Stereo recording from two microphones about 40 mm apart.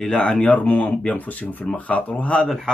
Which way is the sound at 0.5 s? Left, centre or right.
Left.